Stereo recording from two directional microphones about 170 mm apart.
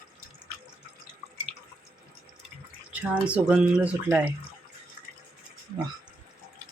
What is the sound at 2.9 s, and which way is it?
Speech, 10° right (ahead or behind).